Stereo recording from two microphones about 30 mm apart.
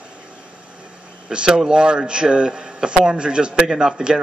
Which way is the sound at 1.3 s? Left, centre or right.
Right.